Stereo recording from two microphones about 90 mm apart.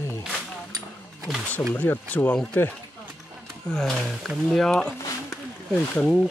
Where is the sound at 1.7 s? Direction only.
20° left (ahead or behind).